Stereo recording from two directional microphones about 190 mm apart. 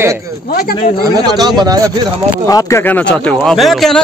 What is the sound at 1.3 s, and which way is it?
Speech, 20° right (ahead or behind).